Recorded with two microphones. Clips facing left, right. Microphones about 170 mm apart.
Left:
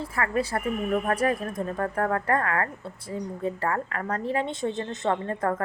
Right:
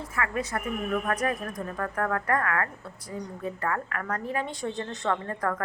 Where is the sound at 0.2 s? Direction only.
30° left (ahead or behind).